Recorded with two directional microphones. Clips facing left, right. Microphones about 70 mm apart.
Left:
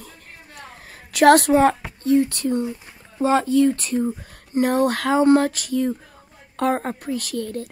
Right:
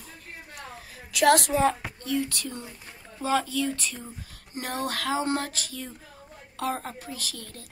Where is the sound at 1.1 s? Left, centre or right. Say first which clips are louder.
Left 8 dB; left.